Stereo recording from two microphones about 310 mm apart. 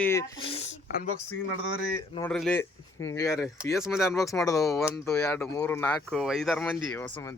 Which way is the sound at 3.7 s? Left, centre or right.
Centre.